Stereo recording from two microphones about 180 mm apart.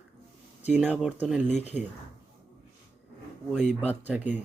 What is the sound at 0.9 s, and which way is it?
Speech, 5° right (ahead or behind).